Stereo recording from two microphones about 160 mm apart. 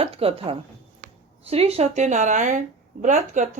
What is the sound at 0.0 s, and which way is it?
Speech, 35° right (ahead or behind).